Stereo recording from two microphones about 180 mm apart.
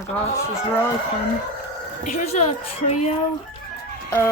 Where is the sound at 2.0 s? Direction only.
45° left (ahead or behind).